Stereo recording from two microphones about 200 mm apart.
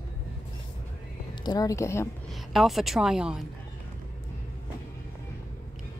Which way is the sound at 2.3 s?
Centre (ahead or behind).